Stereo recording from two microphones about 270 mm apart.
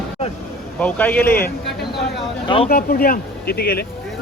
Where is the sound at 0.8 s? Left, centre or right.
Centre.